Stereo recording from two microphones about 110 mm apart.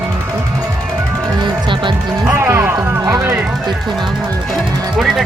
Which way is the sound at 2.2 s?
20° right (ahead or behind).